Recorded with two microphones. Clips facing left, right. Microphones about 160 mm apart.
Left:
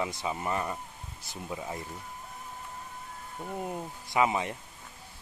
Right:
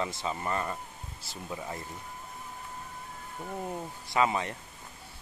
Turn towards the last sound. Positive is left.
turn(degrees=15)  # may be behind; listen again after turning